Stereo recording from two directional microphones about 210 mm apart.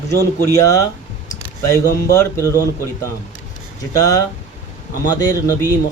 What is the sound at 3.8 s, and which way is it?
Speech, 15° left (ahead or behind).